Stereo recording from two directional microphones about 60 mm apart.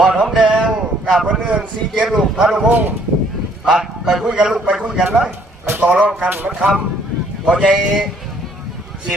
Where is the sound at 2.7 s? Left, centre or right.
Right.